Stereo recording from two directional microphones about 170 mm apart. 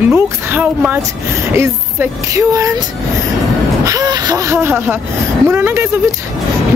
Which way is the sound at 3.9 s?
20° right (ahead or behind).